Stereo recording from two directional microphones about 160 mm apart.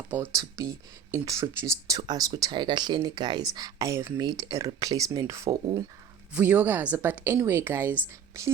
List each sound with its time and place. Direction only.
0.1 s a woman's voice: 10° right (ahead or behind)
6.3 s a woman's voice: 10° right (ahead or behind)